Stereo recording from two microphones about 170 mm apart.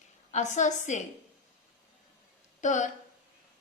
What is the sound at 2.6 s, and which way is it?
Speech, 45° left (ahead or behind).